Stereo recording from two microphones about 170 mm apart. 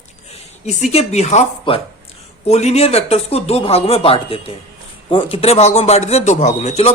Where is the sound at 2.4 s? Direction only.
40° left (ahead or behind).